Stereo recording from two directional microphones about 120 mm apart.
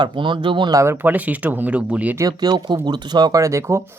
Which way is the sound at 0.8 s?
15° right (ahead or behind).